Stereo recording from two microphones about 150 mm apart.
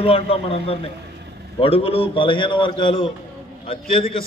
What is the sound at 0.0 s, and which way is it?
A man's voice, 40° left (ahead or behind).